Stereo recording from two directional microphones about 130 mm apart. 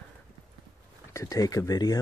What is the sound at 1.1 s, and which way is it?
Speech, 25° left (ahead or behind).